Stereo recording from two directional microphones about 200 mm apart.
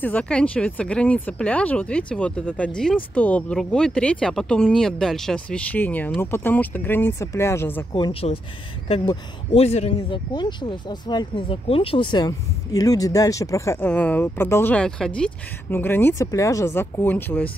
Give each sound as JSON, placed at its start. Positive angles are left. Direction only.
{"t": 0.0, "sound": "speech", "side_deg": 5}
{"t": 7.9, "sound": "speech", "side_deg": 25}